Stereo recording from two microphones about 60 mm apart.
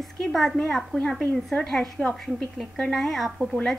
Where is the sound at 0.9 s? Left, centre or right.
Centre.